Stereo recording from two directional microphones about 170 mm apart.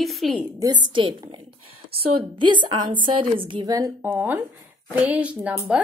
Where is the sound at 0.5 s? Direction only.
25° right (ahead or behind).